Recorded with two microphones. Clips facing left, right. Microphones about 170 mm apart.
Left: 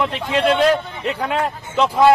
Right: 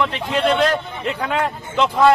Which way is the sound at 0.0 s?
5° left (ahead or behind).